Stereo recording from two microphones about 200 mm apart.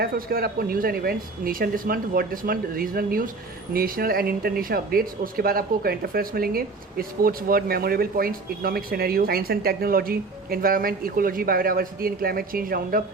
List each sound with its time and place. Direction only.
0.0 s speech: 50° right (ahead or behind)